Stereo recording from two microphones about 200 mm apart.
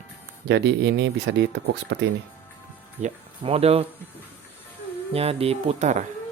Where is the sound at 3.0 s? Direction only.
30° right (ahead or behind).